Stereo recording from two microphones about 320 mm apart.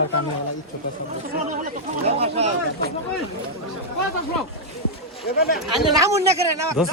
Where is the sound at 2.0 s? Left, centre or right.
Centre.